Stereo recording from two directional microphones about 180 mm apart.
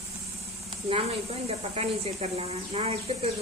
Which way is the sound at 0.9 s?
35° right (ahead or behind).